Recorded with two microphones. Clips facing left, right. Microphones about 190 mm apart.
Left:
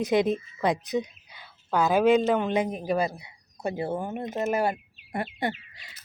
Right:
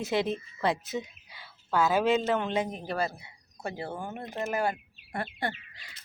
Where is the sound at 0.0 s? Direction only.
15° left (ahead or behind).